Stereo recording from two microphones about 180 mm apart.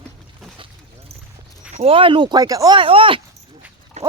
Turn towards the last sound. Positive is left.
turn(degrees=-40)  # may be behind; listen again after turning